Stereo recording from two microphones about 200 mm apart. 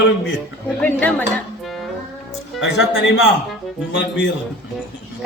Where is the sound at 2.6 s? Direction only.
65° left (ahead or behind).